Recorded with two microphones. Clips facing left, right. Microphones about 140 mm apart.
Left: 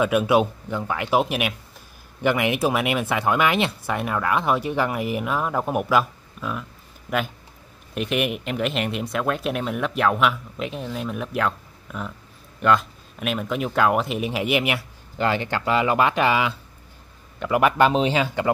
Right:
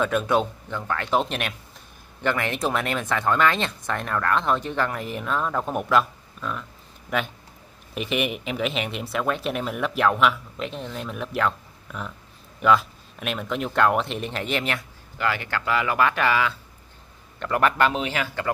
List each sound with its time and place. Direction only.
0.0 s speech: 10° left (ahead or behind)
7.9 s speech: centre (ahead or behind)
15.1 s speech: 25° left (ahead or behind)